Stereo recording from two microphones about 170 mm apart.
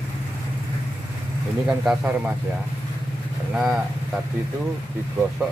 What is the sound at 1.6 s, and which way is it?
Speech, 5° right (ahead or behind).